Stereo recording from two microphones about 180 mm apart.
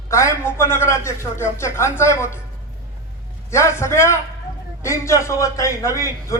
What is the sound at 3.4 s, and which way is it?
Speech, 15° left (ahead or behind).